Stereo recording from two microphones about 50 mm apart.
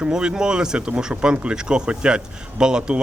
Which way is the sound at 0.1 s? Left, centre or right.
Centre.